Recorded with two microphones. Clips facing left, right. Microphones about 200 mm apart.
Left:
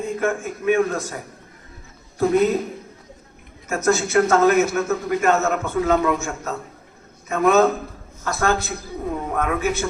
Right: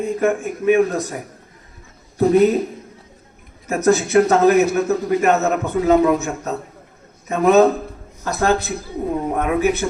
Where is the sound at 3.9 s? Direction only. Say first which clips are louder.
Right 2 dB; 15° right (ahead or behind).